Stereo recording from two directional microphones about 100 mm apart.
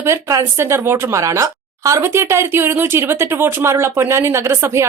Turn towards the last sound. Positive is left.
turn(degrees=-30)  # may be behind; listen again after turning